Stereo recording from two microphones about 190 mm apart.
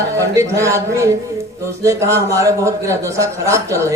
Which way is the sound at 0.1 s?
15° right (ahead or behind).